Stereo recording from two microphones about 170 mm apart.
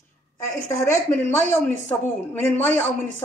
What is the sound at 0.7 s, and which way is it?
A woman's voice, 15° left (ahead or behind).